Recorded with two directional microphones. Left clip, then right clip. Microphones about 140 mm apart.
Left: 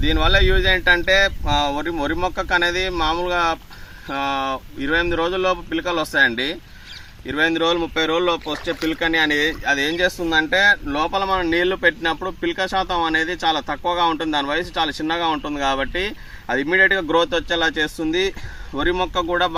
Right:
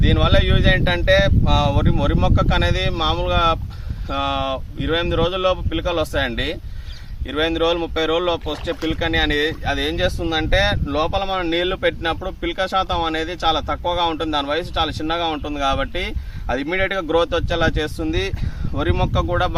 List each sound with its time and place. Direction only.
0.0 s speech: 40° right (ahead or behind)